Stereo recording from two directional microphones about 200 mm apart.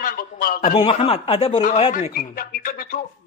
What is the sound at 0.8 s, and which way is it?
Speech, 25° left (ahead or behind).